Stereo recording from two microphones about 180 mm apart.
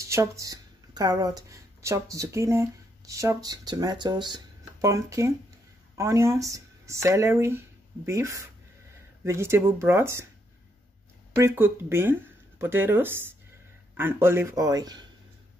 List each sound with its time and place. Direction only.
0.0 s speech: 15° right (ahead or behind)
11.3 s speech: 15° right (ahead or behind)